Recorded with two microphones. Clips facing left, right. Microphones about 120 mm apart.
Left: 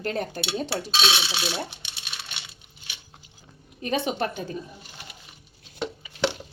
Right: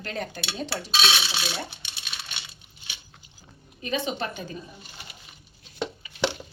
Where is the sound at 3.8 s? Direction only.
55° left (ahead or behind).